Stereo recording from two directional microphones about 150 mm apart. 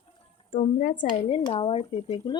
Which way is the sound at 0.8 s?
60° left (ahead or behind).